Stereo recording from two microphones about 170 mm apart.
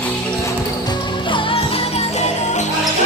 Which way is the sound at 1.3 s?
30° left (ahead or behind).